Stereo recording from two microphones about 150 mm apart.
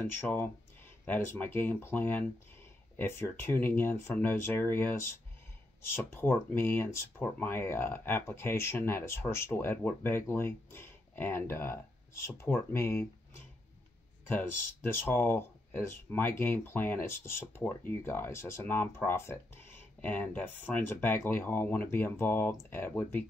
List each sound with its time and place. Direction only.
0.0 s speech: 15° left (ahead or behind)
14.3 s speech: 15° left (ahead or behind)